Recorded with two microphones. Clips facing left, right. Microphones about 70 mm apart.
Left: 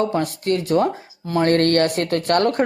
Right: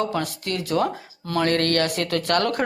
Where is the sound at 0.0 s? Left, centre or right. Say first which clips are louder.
Left 4 dB; left.